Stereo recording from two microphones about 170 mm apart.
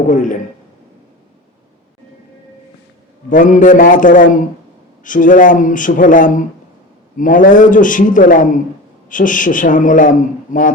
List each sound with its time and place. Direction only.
0.1 s a man's voice: 50° left (ahead or behind)
3.2 s a man's voice: 50° left (ahead or behind)